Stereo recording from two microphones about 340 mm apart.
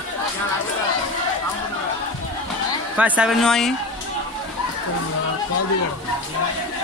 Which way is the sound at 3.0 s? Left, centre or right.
Centre.